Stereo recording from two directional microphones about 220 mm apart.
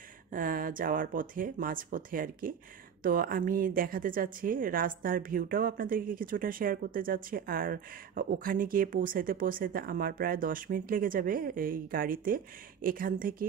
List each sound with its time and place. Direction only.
0.3 s speech: 40° right (ahead or behind)